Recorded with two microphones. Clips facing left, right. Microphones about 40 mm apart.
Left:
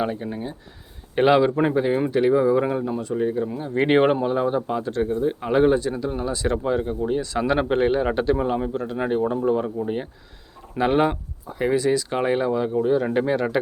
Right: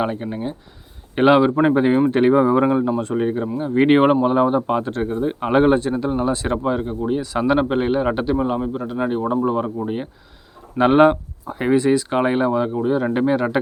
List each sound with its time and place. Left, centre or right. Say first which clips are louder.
0.0 s speech: right 3 dB; right
1.7 s speech: right 5 dB; right
2.6 s speech: right 6 dB; centre
3.0 s speech: right 3 dB; right
3.6 s speech: right 4 dB; centre
4.6 s speech: right 3 dB; right
6.7 s speech: right 3 dB; centre
10.8 s speech: right 7 dB; right